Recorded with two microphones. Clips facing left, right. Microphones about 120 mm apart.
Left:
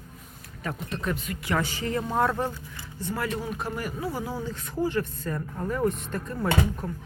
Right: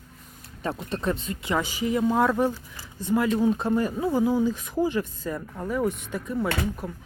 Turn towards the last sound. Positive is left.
turn(degrees=-5)  # may be behind; listen again after turning